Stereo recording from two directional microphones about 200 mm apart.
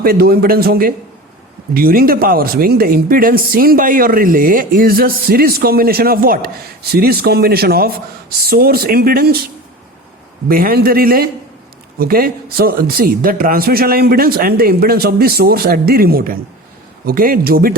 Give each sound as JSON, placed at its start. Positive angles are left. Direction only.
{"t": 0.0, "sound": "speech", "side_deg": -50}
{"t": 10.5, "sound": "speech", "side_deg": -50}